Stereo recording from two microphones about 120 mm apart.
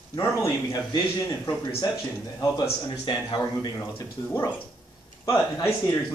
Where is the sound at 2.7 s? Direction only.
45° left (ahead or behind).